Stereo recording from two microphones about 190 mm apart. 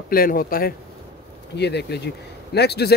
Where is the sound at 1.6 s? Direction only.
60° left (ahead or behind).